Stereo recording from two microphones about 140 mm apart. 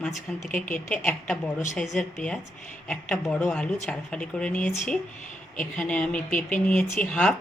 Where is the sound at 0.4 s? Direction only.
70° left (ahead or behind).